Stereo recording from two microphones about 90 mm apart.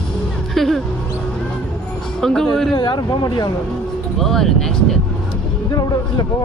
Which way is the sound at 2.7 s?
55° left (ahead or behind).